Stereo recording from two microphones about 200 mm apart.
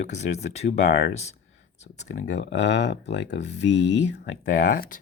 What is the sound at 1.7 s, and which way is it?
Speech, 35° left (ahead or behind).